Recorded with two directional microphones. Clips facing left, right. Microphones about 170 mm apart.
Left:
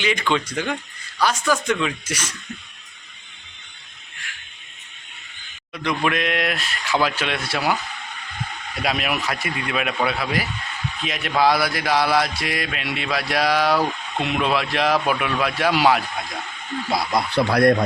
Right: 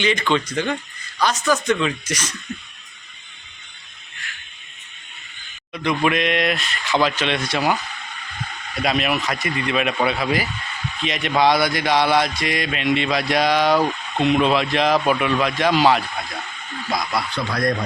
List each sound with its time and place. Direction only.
0.0 s speech: 10° left (ahead or behind)
5.7 s speech: centre (ahead or behind)
8.8 s speech: 5° left (ahead or behind)
17.3 s speech: 65° left (ahead or behind)